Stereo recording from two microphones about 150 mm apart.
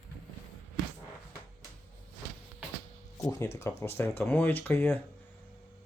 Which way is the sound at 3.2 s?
20° left (ahead or behind).